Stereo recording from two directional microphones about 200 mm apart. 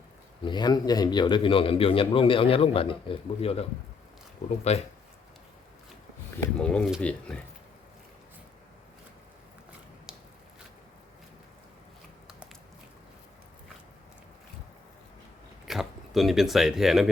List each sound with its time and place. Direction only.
0.4 s a man's voice: 20° left (ahead or behind); by 4.6 s 35° left (ahead or behind)
6.6 s speech: 5° left (ahead or behind)
10.1 s squish: 5° right (ahead or behind)
15.6 s speech: centre (ahead or behind)